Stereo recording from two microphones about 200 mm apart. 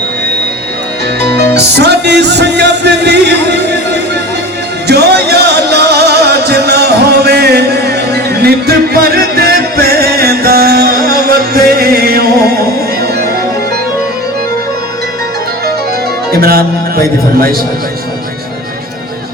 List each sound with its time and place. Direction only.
1.2 s music: 10° left (ahead or behind)
1.7 s music: 60° right (ahead or behind)
16.3 s music: 50° right (ahead or behind)